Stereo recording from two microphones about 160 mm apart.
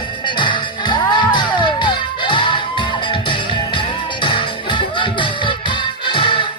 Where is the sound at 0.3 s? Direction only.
30° left (ahead or behind).